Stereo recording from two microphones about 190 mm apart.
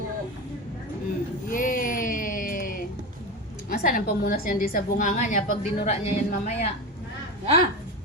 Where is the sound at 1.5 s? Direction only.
45° left (ahead or behind).